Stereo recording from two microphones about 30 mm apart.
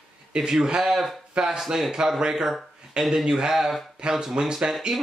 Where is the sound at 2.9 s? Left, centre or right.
Right.